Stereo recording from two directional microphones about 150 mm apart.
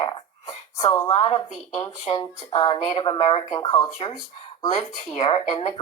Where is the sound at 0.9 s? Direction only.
25° left (ahead or behind).